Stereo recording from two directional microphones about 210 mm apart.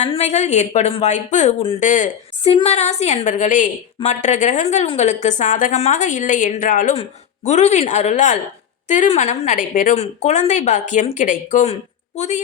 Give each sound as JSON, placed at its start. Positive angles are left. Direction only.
{"t": 0.0, "sound": "speech", "side_deg": 30}